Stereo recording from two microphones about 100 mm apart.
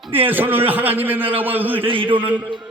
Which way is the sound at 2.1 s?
20° right (ahead or behind).